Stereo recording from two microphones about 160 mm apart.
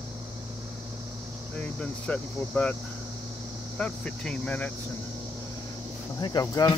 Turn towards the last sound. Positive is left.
turn(degrees=25)  # may be behind; listen again after turning